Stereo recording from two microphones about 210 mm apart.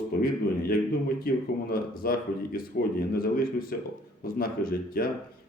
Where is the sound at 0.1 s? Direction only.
45° left (ahead or behind).